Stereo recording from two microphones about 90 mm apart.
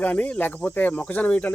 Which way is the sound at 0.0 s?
15° left (ahead or behind).